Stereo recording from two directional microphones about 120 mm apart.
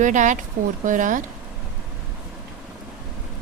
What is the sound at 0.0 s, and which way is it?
A woman's voice, 90° right.